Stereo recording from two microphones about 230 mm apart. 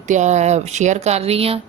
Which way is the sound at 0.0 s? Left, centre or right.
Right.